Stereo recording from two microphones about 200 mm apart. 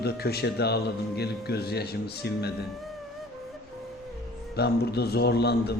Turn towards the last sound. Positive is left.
turn(degrees=55)  # may be behind; listen again after turning